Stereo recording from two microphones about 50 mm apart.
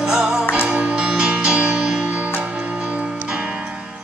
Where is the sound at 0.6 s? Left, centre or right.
Right.